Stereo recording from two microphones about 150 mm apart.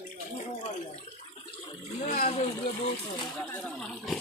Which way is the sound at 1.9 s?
75° left (ahead or behind).